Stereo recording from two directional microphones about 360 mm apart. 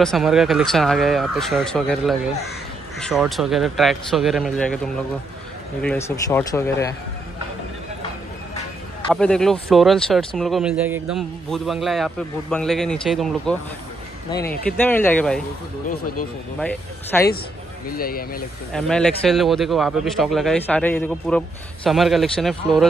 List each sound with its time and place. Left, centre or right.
0.0 s speech: centre
9.1 s speech: centre
16.5 s speech: centre
17.8 s speech: left
18.7 s speech: centre